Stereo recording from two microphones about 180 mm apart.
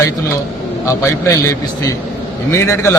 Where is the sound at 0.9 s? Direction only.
15° left (ahead or behind).